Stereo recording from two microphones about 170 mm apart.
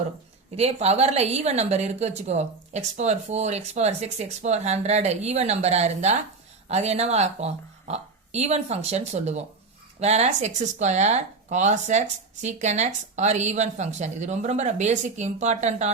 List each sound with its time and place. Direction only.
0.5 s a woman's voice: 40° right (ahead or behind)